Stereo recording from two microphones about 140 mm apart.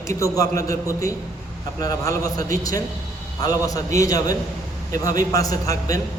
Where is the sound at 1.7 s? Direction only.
25° left (ahead or behind).